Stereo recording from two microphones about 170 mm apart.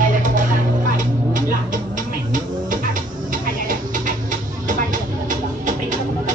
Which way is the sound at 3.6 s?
50° right (ahead or behind).